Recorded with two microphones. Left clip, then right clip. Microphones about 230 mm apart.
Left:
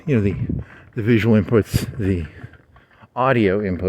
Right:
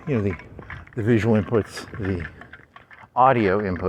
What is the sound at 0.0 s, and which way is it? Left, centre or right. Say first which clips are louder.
Speech: left 4 dB; left.